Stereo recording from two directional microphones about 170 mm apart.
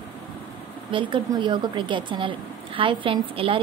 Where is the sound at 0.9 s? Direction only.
30° right (ahead or behind).